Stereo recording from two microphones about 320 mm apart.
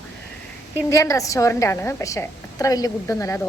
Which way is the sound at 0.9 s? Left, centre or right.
Centre.